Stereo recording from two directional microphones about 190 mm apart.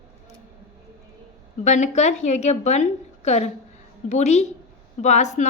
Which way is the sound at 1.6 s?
40° left (ahead or behind).